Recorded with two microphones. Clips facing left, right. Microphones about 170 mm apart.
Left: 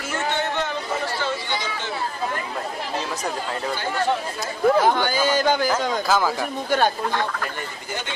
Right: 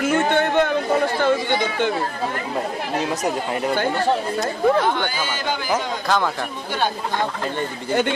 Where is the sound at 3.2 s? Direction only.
15° right (ahead or behind).